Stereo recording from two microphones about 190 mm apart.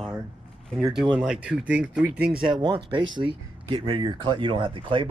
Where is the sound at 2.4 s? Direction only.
25° right (ahead or behind).